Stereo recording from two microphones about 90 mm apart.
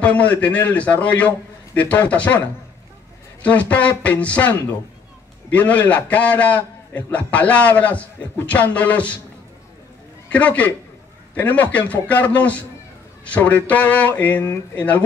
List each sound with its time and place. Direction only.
0.0 s a man's voice: 15° left (ahead or behind)
3.4 s a man's voice: 15° left (ahead or behind)
10.3 s a man's voice: 15° left (ahead or behind)